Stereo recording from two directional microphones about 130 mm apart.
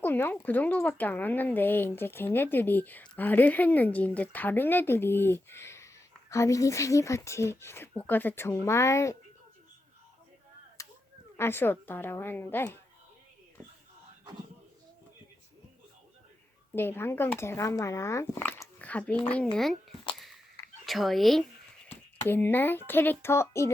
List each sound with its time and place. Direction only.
0.0 s speech: 15° left (ahead or behind)
10.8 s a sound: 25° left (ahead or behind)
11.3 s speech: 15° left (ahead or behind)
16.7 s speech: 15° left (ahead or behind)
20.1 s a sound: centre (ahead or behind)
20.8 s speech: centre (ahead or behind)
22.2 s speech: 15° left (ahead or behind)